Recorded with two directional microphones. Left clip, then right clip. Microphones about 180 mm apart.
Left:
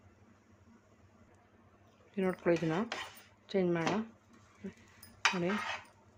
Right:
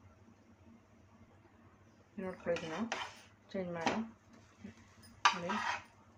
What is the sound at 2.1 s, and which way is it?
Speech, 65° left (ahead or behind).